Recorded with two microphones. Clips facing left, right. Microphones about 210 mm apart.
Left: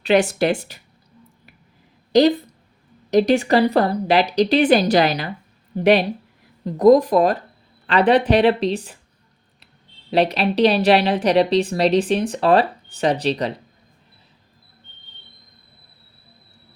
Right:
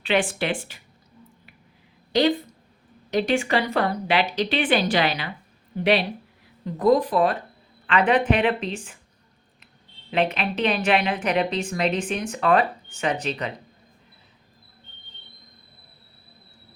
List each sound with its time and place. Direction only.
0.0 s a woman's voice: 40° left (ahead or behind)
3.1 s a woman's voice: 40° left (ahead or behind)
10.1 s a woman's voice: 35° left (ahead or behind)